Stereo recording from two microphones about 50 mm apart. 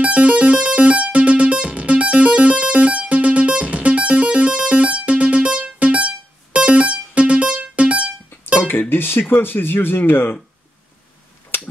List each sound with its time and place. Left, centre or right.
0.0 s music: right
8.6 s speech: left
11.5 s a sound: left